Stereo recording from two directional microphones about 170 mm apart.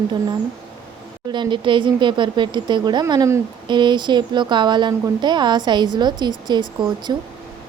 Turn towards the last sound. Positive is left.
turn(degrees=-25)  # may be behind; listen again after turning